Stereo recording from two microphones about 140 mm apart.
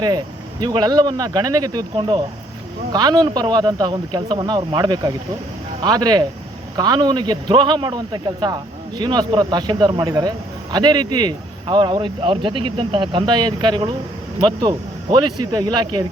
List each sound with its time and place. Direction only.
0.6 s a man's voice: 30° right (ahead or behind)